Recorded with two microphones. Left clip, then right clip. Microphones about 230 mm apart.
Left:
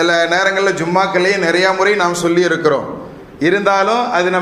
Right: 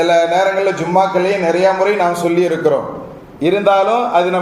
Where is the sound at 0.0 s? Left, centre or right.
Left.